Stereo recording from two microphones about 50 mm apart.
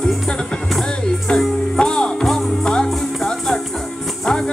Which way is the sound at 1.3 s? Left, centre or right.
Centre.